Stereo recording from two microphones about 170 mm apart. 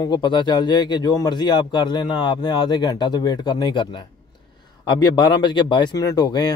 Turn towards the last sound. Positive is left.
turn(degrees=25)  # may be behind; listen again after turning